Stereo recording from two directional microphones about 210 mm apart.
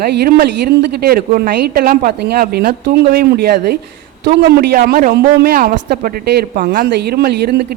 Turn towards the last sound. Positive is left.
turn(degrees=-50)  # may be behind; listen again after turning